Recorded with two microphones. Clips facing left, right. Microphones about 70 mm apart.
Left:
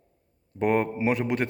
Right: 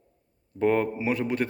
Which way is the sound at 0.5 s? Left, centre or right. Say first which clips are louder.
Even; left.